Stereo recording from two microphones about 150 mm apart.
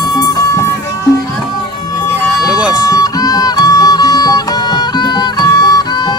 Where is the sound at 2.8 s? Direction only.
25° left (ahead or behind).